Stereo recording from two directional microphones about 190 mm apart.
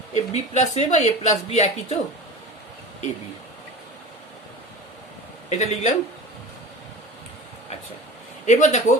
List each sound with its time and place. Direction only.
0.1 s speech: 35° left (ahead or behind)
5.5 s speech: 40° left (ahead or behind)
8.4 s speech: 40° left (ahead or behind)